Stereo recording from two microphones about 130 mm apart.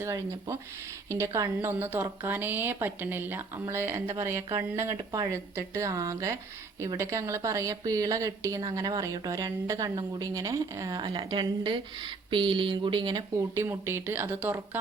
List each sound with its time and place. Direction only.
0.0 s a woman's voice: 20° right (ahead or behind)
9.9 s speech: 35° right (ahead or behind)
10.2 s a woman's voice: 25° right (ahead or behind)
11.1 s speech: 40° right (ahead or behind)
13.6 s speech: 20° right (ahead or behind)